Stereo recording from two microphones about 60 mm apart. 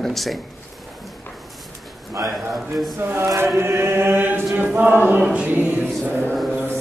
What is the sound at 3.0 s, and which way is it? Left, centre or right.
Chant, right.